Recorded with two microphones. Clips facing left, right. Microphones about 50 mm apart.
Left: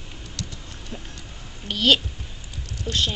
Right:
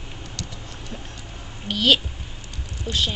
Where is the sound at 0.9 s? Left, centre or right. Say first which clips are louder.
Left 1 dB; centre.